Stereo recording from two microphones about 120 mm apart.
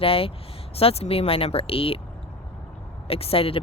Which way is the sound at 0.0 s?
50° left (ahead or behind).